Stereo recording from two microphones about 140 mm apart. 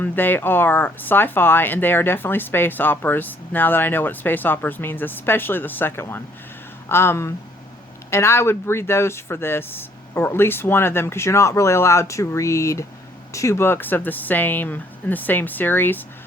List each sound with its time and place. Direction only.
0.0 s speech: 15° left (ahead or behind)